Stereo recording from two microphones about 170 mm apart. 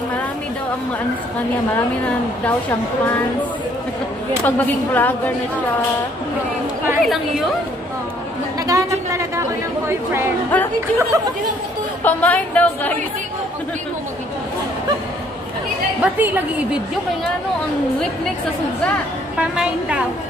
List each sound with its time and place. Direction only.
4.5 s a woman's voice: 10° left (ahead or behind)
7.0 s speech: centre (ahead or behind)
8.6 s a woman's voice: 20° right (ahead or behind)
10.5 s chatter: 10° left (ahead or behind)
12.0 s a woman's voice: 10° left (ahead or behind)
16.0 s a woman's voice: 10° right (ahead or behind)
19.5 s a woman's voice: 5° right (ahead or behind)